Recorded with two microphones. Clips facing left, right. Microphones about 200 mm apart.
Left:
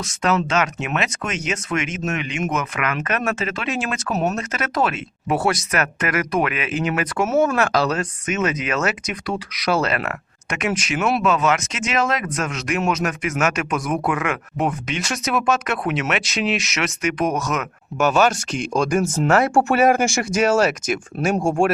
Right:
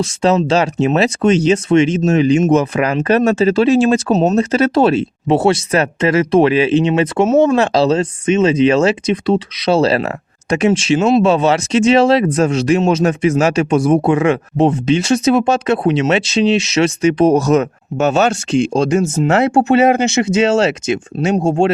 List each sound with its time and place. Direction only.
0.0 s speech: 30° right (ahead or behind)